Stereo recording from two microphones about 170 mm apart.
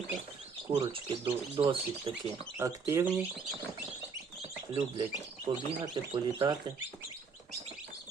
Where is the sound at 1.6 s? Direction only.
30° right (ahead or behind).